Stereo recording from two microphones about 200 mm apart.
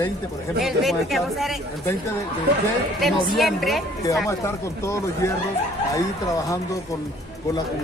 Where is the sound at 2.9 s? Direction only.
Centre (ahead or behind).